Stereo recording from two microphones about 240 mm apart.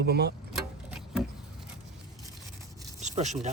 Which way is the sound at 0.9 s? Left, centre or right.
Centre.